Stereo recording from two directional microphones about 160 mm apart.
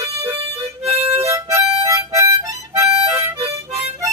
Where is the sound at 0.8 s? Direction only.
40° right (ahead or behind).